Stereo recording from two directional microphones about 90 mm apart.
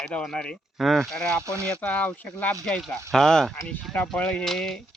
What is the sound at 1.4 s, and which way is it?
Speech, 35° right (ahead or behind).